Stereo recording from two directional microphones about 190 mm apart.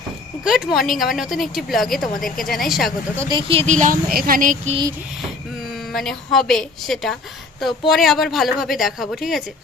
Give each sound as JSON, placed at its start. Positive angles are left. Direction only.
{"t": 0.4, "sound": "speech", "side_deg": 0}
{"t": 2.1, "sound": "speech", "side_deg": 45}
{"t": 2.4, "sound": "speech", "side_deg": 0}
{"t": 3.2, "sound": "speech", "side_deg": -20}
{"t": 5.9, "sound": "speech", "side_deg": 0}